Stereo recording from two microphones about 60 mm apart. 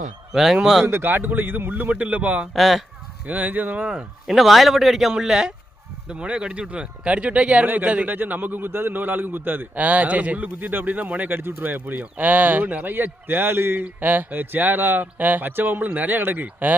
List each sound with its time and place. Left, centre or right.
0.3 s speech: centre
0.9 s speech: right
2.5 s speech: centre
3.2 s speech: right
3.8 s a man's voice: centre
4.4 s a man's voice: centre; by 16.7 s right